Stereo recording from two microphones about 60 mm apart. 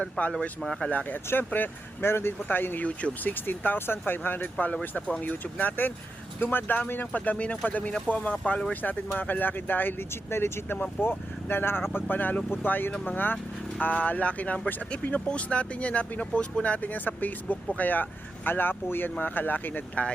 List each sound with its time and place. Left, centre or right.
0.0 s speech: centre
0.9 s speech: left
2.8 s speech: left
3.3 s speech: left
4.6 s speech: left